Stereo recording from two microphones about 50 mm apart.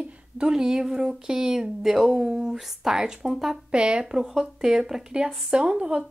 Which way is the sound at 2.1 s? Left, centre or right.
Right.